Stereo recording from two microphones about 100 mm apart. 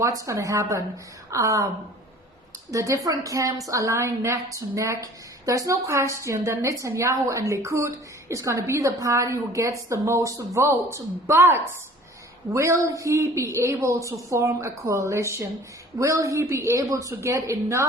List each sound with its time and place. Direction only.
0.0 s a woman's voice: 30° right (ahead or behind)